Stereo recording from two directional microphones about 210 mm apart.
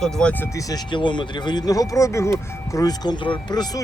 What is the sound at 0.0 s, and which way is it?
Speech, 5° left (ahead or behind).